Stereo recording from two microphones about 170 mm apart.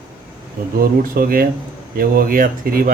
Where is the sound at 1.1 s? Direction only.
55° right (ahead or behind).